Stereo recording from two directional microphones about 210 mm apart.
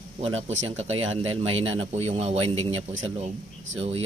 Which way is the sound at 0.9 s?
70° right (ahead or behind).